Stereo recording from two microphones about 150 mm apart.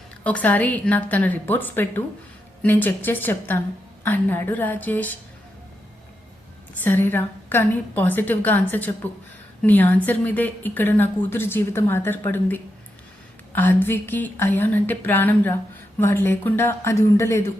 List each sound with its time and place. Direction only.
0.3 s a woman's voice: 10° left (ahead or behind)
6.8 s a woman's voice: 15° left (ahead or behind)